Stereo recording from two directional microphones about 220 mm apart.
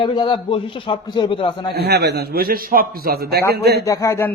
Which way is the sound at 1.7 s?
50° right (ahead or behind).